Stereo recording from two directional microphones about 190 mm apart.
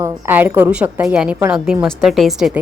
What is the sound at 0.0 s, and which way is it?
A woman's voice, 10° right (ahead or behind).